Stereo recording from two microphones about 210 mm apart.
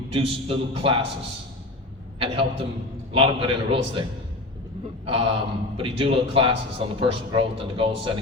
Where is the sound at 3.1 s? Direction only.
25° right (ahead or behind).